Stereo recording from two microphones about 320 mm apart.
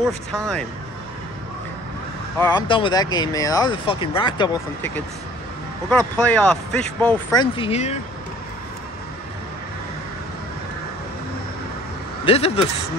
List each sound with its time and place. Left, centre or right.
2.3 s speech: centre
7.5 s speech: centre
12.3 s speech: centre